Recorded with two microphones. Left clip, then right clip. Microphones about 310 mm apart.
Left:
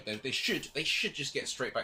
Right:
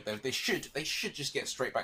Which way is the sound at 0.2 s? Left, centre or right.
Centre.